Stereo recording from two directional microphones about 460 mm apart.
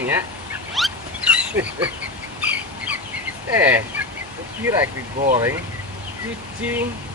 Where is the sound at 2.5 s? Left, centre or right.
Centre.